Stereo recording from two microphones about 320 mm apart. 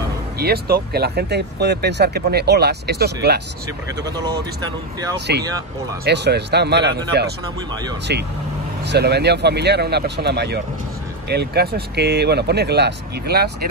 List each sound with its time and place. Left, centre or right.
0.4 s speech: right
4.0 s speech: centre
5.1 s speech: right
5.4 s speech: centre
6.0 s speech: right